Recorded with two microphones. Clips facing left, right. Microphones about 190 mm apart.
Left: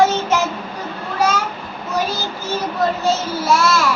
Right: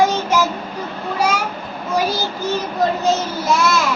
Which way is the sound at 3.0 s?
15° right (ahead or behind).